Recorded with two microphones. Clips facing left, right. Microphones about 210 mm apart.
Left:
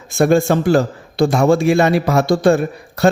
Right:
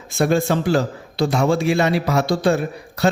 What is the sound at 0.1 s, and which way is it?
A man's voice, 50° left (ahead or behind).